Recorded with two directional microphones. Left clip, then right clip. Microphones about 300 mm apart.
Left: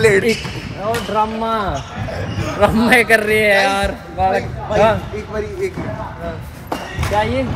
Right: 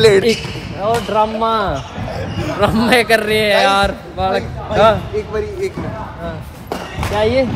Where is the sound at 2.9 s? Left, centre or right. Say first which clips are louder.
Even; centre.